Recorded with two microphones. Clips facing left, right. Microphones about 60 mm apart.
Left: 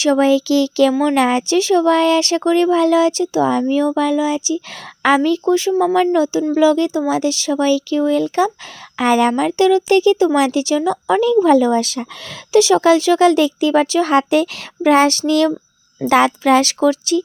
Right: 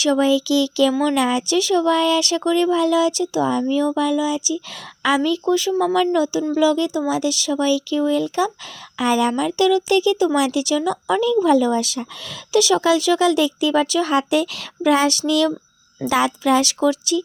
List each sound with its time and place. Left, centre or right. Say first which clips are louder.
0.0 s a woman's voice: left 3 dB; left
9.6 s a woman's voice: left 4 dB; left